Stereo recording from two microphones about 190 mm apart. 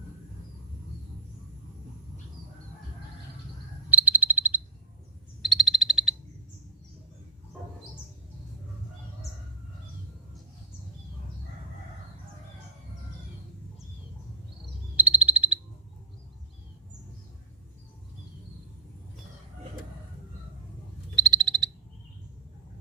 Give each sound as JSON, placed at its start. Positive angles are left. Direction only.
{"t": 3.8, "sound": "frog", "side_deg": -10}
{"t": 14.9, "sound": "frog", "side_deg": -10}
{"t": 21.2, "sound": "frog", "side_deg": -20}